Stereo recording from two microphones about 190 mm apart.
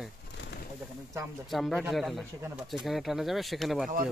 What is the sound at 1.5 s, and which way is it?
Speech, centre (ahead or behind).